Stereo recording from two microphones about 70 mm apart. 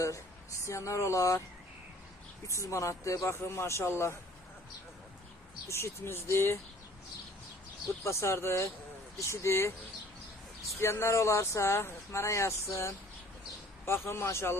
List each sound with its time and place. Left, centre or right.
0.6 s speech: left
2.5 s speech: left
5.6 s speech: left
8.0 s speech: left
10.8 s speech: left